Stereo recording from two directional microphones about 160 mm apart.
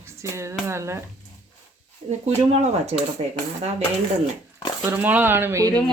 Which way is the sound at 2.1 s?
40° right (ahead or behind).